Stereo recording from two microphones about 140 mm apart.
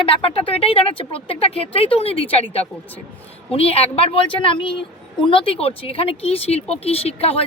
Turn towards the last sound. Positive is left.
turn(degrees=45)  # may be behind; listen again after turning